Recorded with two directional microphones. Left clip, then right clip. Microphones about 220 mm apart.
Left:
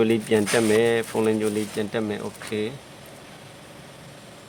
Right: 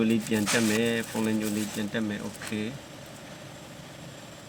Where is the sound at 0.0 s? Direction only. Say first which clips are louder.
Left 7 dB; 50° left (ahead or behind).